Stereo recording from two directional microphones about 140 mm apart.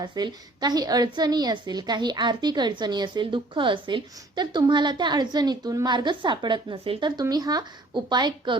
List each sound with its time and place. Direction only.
0.0 s a woman's voice: 30° right (ahead or behind)